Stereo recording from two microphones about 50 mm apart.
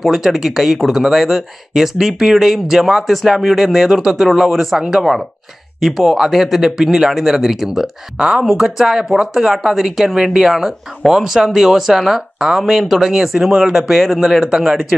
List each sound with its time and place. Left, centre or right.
0.0 s speech: centre
8.2 s speech: right
8.6 s speech: centre
8.9 s speech: centre
14.5 s speech: centre